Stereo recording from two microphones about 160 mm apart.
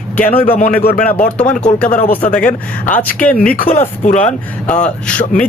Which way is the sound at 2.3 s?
5° left (ahead or behind).